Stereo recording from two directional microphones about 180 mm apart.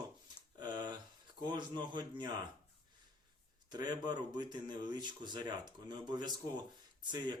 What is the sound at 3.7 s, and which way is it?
Speech, 25° right (ahead or behind).